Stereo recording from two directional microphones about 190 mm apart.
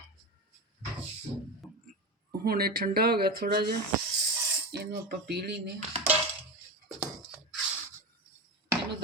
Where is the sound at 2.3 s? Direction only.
50° right (ahead or behind).